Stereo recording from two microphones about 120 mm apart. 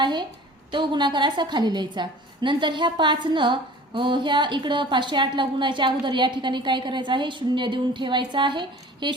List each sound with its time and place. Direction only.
0.0 s a woman's voice: 40° right (ahead or behind)